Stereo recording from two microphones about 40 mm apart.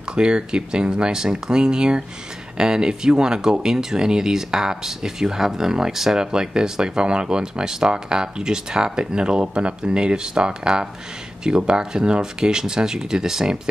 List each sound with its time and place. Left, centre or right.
0.1 s speech: right